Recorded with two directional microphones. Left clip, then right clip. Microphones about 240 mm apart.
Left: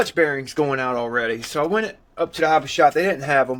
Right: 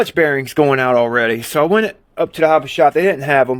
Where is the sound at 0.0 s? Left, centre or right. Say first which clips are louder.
Right 5 dB; right.